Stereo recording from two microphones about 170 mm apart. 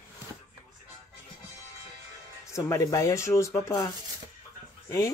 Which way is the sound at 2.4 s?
20° left (ahead or behind).